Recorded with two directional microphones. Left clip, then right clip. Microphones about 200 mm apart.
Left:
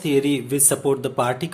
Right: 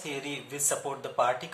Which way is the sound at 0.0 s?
50° left (ahead or behind).